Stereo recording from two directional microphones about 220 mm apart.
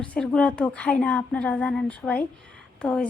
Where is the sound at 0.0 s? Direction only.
5° left (ahead or behind).